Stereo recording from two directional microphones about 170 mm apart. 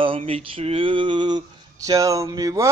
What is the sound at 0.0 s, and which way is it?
Speech, 30° right (ahead or behind).